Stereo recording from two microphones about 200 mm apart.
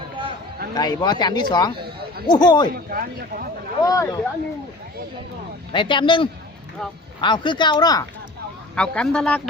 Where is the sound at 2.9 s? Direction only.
45° right (ahead or behind).